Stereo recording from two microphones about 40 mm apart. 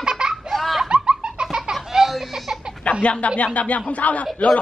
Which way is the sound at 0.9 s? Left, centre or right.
Right.